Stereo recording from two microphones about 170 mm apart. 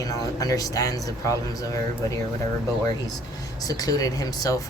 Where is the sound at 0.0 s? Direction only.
20° left (ahead or behind).